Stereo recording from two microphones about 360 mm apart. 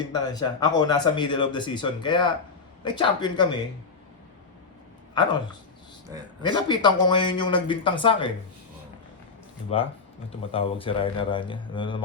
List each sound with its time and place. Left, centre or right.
0.1 s speech: centre
5.1 s speech: centre
6.4 s speech: centre
9.7 s speech: centre